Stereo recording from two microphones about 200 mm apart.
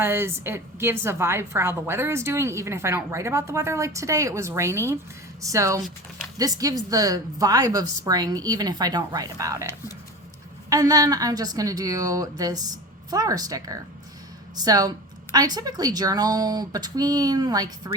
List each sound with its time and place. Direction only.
0.0 s a woman's voice: 10° right (ahead or behind)
10.7 s a woman's voice: 20° right (ahead or behind)